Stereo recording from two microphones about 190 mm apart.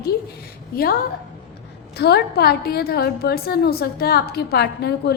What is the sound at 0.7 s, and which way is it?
Speech, 50° left (ahead or behind).